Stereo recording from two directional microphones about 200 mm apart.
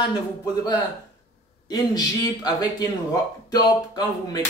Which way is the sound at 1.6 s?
20° left (ahead or behind).